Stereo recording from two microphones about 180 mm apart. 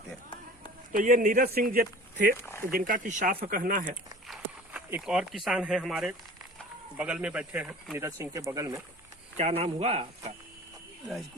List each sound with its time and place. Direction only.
0.9 s speech: 50° right (ahead or behind)
2.3 s speech: 15° left (ahead or behind)
2.7 s speech: 50° right (ahead or behind)
4.3 s a sound: 10° right (ahead or behind)
5.5 s speech: centre (ahead or behind); by 8.8 s 15° right (ahead or behind)
9.4 s speech: 35° right (ahead or behind)